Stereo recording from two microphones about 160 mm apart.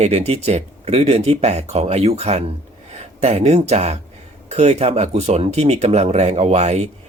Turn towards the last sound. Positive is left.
turn(degrees=-45)  # may be behind; listen again after turning